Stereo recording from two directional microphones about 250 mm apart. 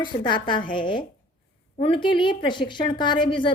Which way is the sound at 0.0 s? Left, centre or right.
Centre.